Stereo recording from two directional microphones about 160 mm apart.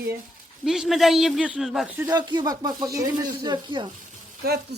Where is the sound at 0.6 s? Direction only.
Centre (ahead or behind).